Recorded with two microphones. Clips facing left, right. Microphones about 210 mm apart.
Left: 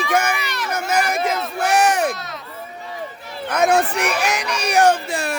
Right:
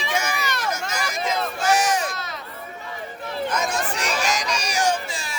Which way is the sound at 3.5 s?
60° left (ahead or behind).